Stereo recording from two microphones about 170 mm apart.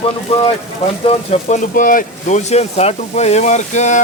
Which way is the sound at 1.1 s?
40° left (ahead or behind).